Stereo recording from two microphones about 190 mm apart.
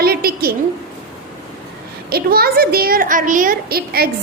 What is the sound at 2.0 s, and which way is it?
A woman's voice, 55° right (ahead or behind).